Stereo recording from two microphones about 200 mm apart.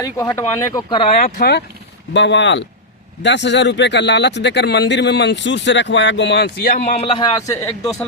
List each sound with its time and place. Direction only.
0.0 s a man's voice: 15° left (ahead or behind)
1.2 s speech: 50° left (ahead or behind)
2.1 s speech: 65° left (ahead or behind)
6.7 s a man's voice: 35° left (ahead or behind); by 7.9 s 15° left (ahead or behind)